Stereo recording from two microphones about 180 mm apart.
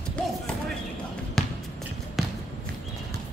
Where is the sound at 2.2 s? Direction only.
Centre (ahead or behind).